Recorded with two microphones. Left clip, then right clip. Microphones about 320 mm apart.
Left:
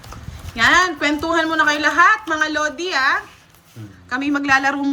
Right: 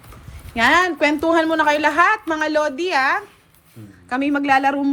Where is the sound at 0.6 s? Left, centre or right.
Centre.